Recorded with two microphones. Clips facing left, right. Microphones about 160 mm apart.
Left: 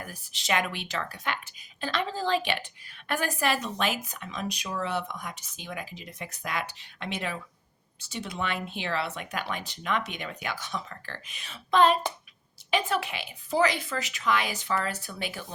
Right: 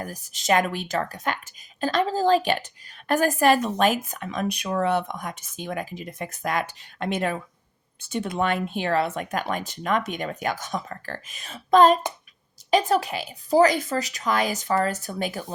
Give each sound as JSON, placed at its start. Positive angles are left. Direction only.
{"t": 0.0, "sound": "a woman's voice", "side_deg": -45}